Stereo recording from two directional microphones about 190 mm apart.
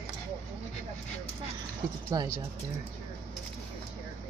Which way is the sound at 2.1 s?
20° right (ahead or behind).